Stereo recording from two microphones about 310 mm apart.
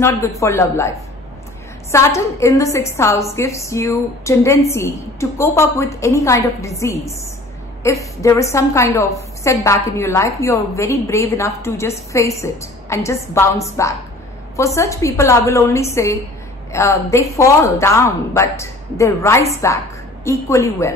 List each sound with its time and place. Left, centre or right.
0.0 s a woman's voice: centre